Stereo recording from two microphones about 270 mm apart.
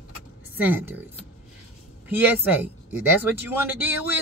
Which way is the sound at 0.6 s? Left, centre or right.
Centre.